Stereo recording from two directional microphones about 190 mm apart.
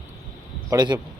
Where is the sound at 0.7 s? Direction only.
20° right (ahead or behind).